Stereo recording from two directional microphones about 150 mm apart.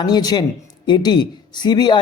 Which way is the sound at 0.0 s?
25° left (ahead or behind).